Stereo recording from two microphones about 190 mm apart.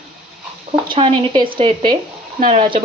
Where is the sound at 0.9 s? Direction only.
25° right (ahead or behind).